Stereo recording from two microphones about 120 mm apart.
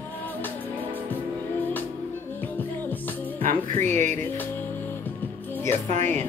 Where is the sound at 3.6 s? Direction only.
85° right.